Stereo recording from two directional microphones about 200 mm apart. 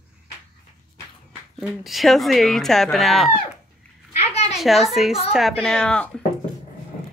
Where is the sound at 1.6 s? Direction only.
Centre (ahead or behind).